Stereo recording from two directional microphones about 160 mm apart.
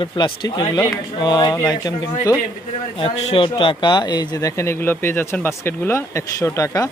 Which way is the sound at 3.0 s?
35° left (ahead or behind).